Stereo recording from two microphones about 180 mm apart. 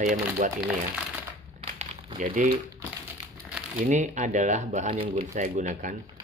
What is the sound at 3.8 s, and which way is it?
Speech, 45° right (ahead or behind).